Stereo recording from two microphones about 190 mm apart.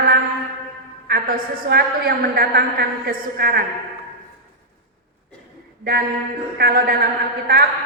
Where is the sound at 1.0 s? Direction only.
50° right (ahead or behind).